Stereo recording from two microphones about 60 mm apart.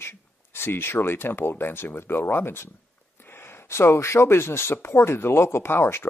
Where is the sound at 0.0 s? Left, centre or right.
Left.